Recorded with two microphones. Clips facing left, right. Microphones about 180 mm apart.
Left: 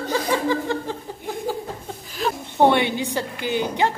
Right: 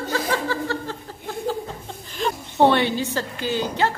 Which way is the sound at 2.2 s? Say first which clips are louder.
Even; 5° left (ahead or behind).